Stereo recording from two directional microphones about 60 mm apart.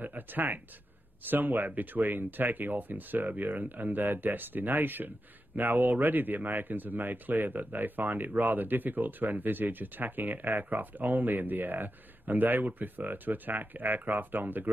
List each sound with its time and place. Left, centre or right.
0.0 s speech: right